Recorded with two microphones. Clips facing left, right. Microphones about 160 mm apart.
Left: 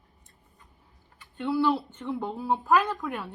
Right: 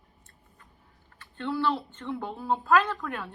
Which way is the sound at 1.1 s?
15° left (ahead or behind).